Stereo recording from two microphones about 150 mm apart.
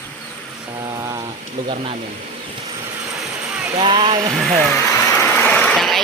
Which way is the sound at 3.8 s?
30° right (ahead or behind).